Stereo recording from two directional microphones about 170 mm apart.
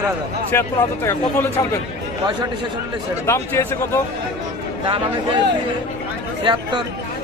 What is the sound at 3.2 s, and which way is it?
Speech, 15° left (ahead or behind).